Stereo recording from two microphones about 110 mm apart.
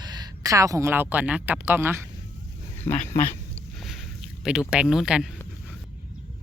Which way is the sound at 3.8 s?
Centre (ahead or behind).